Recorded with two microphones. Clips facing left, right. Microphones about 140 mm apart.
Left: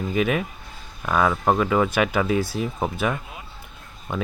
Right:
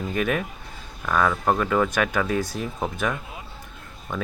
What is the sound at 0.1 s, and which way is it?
Speech, 5° left (ahead or behind).